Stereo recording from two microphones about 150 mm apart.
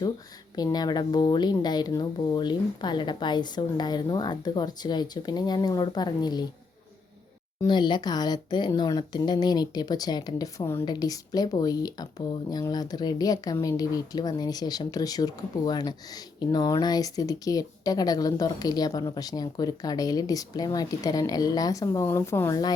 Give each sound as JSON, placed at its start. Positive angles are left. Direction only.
{"t": 0.5, "sound": "speech", "side_deg": 25}
{"t": 7.7, "sound": "speech", "side_deg": 30}